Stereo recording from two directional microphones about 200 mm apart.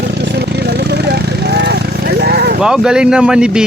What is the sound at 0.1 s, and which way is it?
Vehicle, 60° right (ahead or behind).